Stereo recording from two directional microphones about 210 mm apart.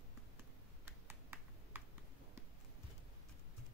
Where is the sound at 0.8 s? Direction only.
10° right (ahead or behind).